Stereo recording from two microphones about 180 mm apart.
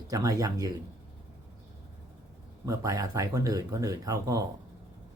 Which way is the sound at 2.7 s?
20° right (ahead or behind).